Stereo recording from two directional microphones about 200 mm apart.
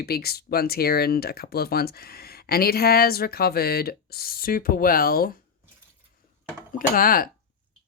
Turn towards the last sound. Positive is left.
turn(degrees=45)  # may be behind; listen again after turning